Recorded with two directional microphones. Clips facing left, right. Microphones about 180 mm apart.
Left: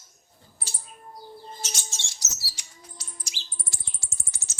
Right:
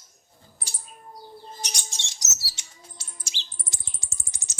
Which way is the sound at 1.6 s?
15° right (ahead or behind).